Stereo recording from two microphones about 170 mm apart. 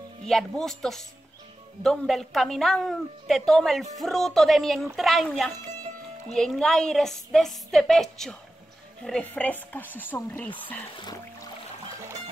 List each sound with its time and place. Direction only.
0.2 s a woman's voice: centre (ahead or behind)
11.0 s music: 25° left (ahead or behind)